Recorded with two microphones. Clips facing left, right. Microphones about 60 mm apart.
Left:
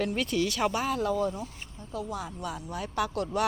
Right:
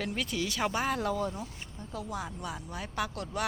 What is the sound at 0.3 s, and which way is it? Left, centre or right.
Speech, centre.